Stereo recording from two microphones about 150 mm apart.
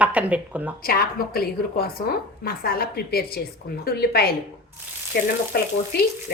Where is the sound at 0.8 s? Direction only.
90° left.